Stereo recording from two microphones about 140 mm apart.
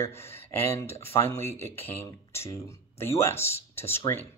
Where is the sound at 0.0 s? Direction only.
20° left (ahead or behind).